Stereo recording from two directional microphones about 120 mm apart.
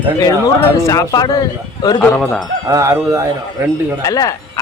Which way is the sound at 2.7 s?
25° right (ahead or behind).